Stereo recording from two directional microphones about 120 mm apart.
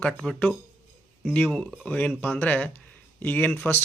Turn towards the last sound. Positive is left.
turn(degrees=15)  # may be behind; listen again after turning